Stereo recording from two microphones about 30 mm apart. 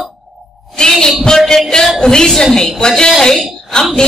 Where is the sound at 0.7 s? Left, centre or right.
Centre.